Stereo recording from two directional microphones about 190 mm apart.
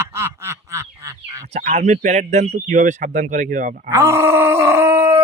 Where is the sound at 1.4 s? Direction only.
35° right (ahead or behind).